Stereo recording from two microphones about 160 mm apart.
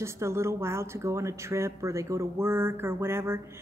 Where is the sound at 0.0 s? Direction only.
15° right (ahead or behind).